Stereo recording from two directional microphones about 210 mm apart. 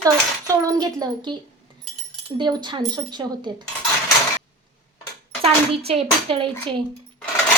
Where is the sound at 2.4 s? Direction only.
20° right (ahead or behind).